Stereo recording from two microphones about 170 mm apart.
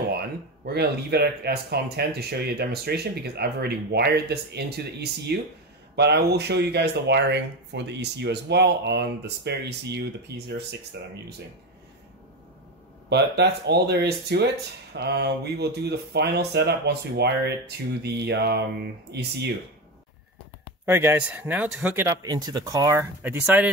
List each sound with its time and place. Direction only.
0.7 s speech: 70° right (ahead or behind)
13.1 s speech: 75° right (ahead or behind)
20.8 s speech: 15° right (ahead or behind)